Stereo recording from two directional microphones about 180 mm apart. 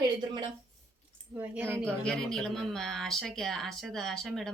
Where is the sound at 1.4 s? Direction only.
10° right (ahead or behind).